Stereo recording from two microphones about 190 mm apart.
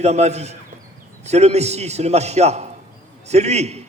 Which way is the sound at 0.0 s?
35° right (ahead or behind).